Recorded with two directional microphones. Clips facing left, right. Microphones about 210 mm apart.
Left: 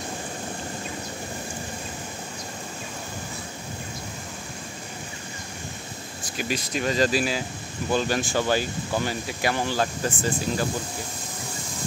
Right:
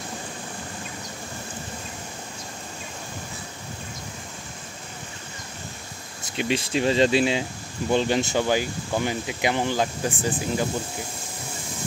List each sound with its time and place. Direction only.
6.2 s speech: 25° right (ahead or behind)